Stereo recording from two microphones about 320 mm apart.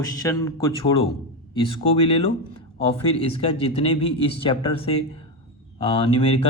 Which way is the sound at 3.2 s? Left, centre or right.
Centre.